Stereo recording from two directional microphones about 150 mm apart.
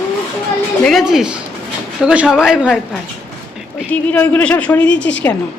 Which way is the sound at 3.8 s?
10° left (ahead or behind).